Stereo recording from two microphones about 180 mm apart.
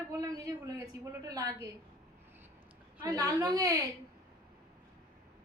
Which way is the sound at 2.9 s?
15° right (ahead or behind).